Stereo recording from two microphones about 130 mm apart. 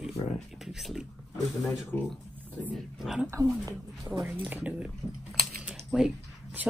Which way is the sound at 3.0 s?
5° right (ahead or behind).